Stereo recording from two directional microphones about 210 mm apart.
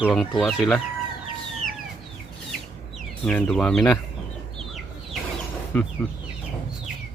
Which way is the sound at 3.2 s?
5° left (ahead or behind).